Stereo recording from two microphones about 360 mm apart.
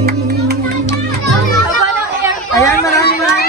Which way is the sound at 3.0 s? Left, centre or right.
Left.